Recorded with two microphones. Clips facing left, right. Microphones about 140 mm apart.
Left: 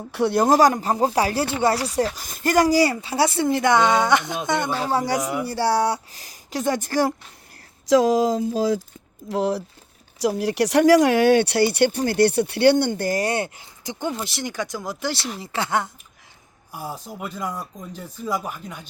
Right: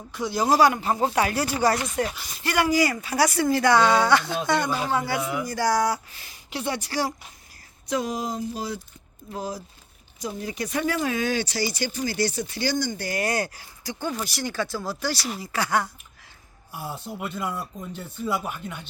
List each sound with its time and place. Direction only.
0.1 s speech: 65° left (ahead or behind); by 1.9 s 30° left (ahead or behind)
2.1 s speech: 45° left (ahead or behind); by 4.7 s 20° left (ahead or behind)
4.8 s speech: 35° left (ahead or behind)
7.9 s a sound: 90° left
9.3 s speech: 70° left (ahead or behind)
13.1 s speech: 35° left (ahead or behind)
17.2 s speech: centre (ahead or behind)